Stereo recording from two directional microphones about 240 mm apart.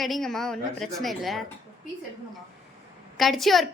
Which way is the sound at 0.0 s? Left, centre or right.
Centre.